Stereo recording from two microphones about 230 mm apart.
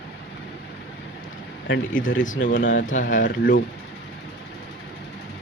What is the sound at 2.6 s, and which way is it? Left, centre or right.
Speech, left.